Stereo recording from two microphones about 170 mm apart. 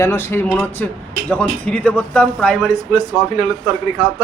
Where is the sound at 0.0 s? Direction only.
15° left (ahead or behind).